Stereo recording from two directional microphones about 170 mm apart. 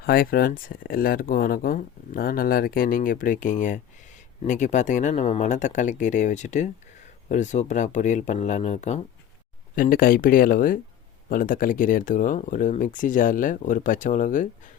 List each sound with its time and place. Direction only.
0.0 s speech: 60° left (ahead or behind); by 9.0 s 40° left (ahead or behind)
9.7 s speech: 55° left (ahead or behind)